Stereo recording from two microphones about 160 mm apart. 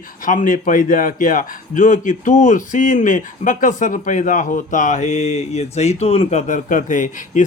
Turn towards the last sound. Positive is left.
turn(degrees=55)  # may be behind; listen again after turning